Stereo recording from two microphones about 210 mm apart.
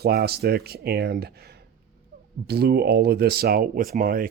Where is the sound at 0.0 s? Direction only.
50° right (ahead or behind).